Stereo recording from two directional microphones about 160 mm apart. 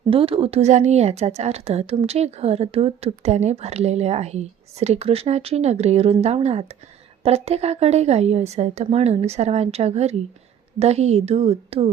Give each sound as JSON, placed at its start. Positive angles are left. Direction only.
{"t": 0.1, "sound": "a woman's voice", "side_deg": -35}